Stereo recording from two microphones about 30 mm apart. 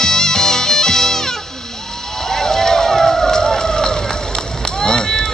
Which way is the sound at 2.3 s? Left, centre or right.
Centre.